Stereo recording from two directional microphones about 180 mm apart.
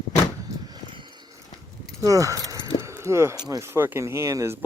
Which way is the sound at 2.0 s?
20° right (ahead or behind).